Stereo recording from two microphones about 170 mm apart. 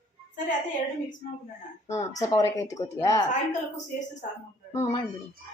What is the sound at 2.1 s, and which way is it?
A woman's voice, 20° left (ahead or behind).